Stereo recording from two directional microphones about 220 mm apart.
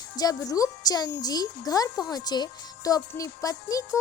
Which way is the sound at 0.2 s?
15° left (ahead or behind).